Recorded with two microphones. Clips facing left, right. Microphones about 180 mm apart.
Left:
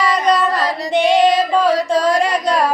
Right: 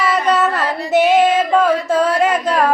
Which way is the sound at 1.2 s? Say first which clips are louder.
Even; 35° left (ahead or behind).